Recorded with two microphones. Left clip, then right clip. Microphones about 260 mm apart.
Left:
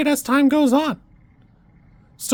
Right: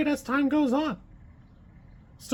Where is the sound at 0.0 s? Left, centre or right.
Left.